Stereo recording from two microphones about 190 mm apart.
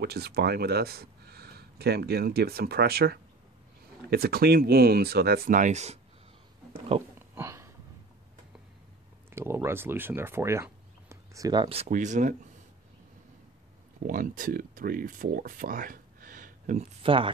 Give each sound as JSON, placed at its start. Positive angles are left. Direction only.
{"t": 0.0, "sound": "speech", "side_deg": -55}
{"t": 7.2, "sound": "a sound", "side_deg": -15}
{"t": 9.3, "sound": "speech", "side_deg": -10}
{"t": 13.9, "sound": "speech", "side_deg": -45}
{"t": 17.0, "sound": "speech", "side_deg": -30}